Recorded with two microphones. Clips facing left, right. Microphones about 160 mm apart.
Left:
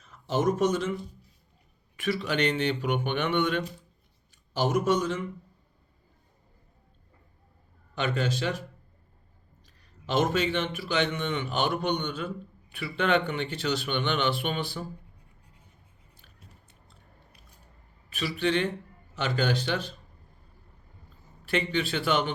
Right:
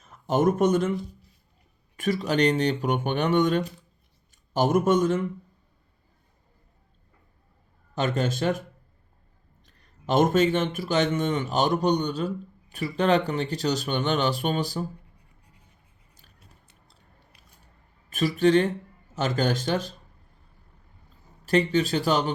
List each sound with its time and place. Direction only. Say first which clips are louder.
0.0 s speech: right 4 dB; 50° right (ahead or behind)
2.0 s speech: right 4 dB; 45° right (ahead or behind)
7.9 s speech: right 3 dB; 45° right (ahead or behind)
10.1 s speech: right 5 dB; 50° right (ahead or behind)
18.1 s speech: right 7 dB; 45° right (ahead or behind)
21.4 s speech: right 6 dB; 40° right (ahead or behind)